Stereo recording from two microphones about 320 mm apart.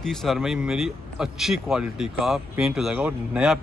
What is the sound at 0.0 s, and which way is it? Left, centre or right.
Speech, centre.